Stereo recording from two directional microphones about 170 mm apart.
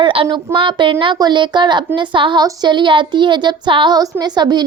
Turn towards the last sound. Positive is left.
turn(degrees=-25)  # may be behind; listen again after turning